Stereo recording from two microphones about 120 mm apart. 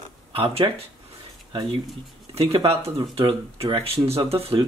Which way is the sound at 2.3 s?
50° right (ahead or behind).